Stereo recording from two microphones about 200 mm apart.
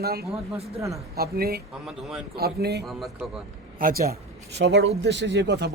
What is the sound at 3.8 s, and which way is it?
Speech, 45° right (ahead or behind).